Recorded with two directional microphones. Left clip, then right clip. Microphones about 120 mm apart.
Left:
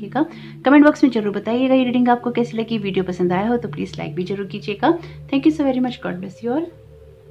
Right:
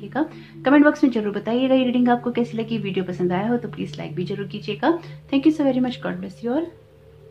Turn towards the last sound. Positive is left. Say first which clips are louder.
# left 2 dB
turn(degrees=20)  # may be behind; listen again after turning